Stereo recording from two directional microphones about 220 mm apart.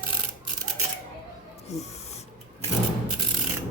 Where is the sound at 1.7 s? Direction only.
30° left (ahead or behind).